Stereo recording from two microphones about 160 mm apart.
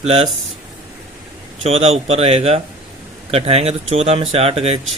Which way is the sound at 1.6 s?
40° right (ahead or behind).